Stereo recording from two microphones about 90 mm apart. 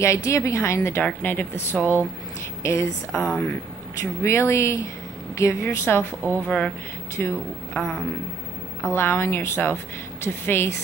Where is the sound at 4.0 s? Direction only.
30° left (ahead or behind).